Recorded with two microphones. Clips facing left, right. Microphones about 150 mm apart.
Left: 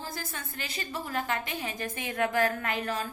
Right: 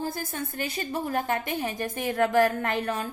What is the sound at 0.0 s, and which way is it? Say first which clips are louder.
A woman's voice: right 7 dB; 50° right (ahead or behind).